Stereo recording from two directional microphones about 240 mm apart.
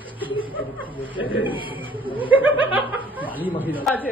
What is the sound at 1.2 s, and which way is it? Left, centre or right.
Speech, centre.